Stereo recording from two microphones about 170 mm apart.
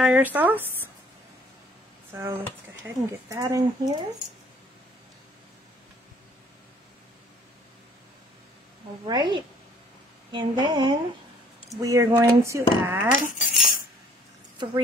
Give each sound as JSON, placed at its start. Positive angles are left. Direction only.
{"t": 0.0, "sound": "speech", "side_deg": -10}
{"t": 2.1, "sound": "speech", "side_deg": -15}
{"t": 9.0, "sound": "speech", "side_deg": -25}
{"t": 13.2, "sound": "cutlery", "side_deg": 50}